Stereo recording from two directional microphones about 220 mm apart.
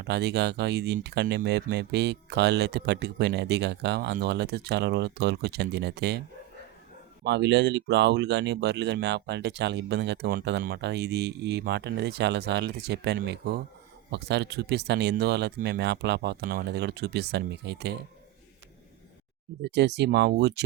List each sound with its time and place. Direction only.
0.0 s speech: 50° right (ahead or behind)
7.3 s speech: 50° right (ahead or behind)
19.6 s speech: 50° right (ahead or behind)